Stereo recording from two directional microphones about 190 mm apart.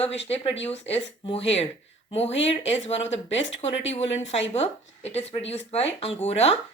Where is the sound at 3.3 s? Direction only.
75° left (ahead or behind).